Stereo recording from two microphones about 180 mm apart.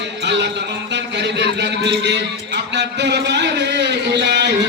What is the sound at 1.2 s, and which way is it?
A man's voice, 75° right (ahead or behind).